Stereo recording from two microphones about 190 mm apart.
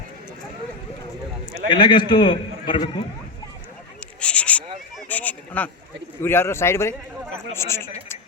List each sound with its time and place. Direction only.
1.7 s a man's voice: 25° left (ahead or behind)
4.2 s a sound: 5° left (ahead or behind)
6.2 s a man's voice: 10° left (ahead or behind)